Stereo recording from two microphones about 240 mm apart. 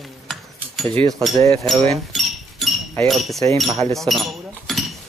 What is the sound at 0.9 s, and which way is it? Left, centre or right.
Speech, right.